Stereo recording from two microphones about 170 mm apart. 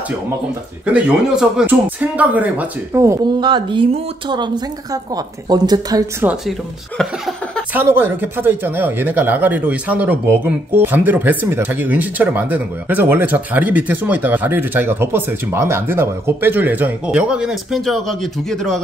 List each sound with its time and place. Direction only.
0.9 s a woman's voice: 5° right (ahead or behind); by 6.0 s 25° right (ahead or behind)
7.0 s a sound: centre (ahead or behind)
7.7 s speech: 10° right (ahead or behind)